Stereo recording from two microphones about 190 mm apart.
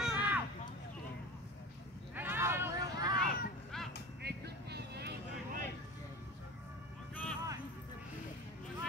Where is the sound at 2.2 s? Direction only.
10° right (ahead or behind).